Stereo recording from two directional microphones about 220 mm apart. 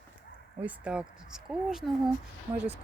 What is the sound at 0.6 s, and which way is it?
Speech, 5° right (ahead or behind).